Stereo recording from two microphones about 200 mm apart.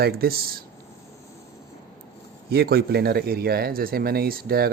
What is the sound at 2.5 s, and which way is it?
Speech, 55° right (ahead or behind).